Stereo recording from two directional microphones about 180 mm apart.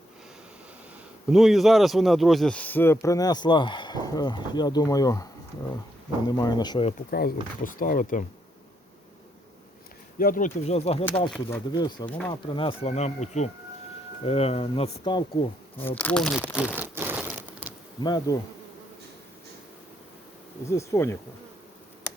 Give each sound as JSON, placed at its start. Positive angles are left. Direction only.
{"t": 1.3, "sound": "speech", "side_deg": 0}
{"t": 6.2, "sound": "speech", "side_deg": 20}
{"t": 7.1, "sound": "speech", "side_deg": 60}
{"t": 10.2, "sound": "speech", "side_deg": 50}
{"t": 11.7, "sound": "speech", "side_deg": 25}
{"t": 12.0, "sound": "speech", "side_deg": 10}
{"t": 12.3, "sound": "speech", "side_deg": 30}
{"t": 16.0, "sound": "speech", "side_deg": 5}
{"t": 17.2, "sound": "crushing", "side_deg": -5}
{"t": 18.0, "sound": "speech", "side_deg": 25}
{"t": 20.7, "sound": "speech", "side_deg": 15}